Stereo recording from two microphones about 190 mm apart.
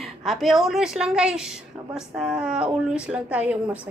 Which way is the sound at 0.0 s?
Centre (ahead or behind).